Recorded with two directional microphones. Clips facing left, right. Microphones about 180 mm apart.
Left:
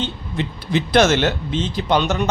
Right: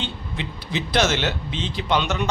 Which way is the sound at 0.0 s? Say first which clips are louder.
Left 5 dB; 50° left (ahead or behind).